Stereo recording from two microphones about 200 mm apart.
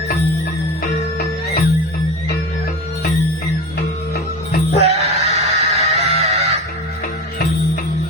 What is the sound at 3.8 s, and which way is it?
Music, 55° left (ahead or behind).